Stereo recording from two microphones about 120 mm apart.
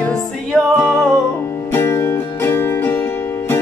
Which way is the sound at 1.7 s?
20° left (ahead or behind).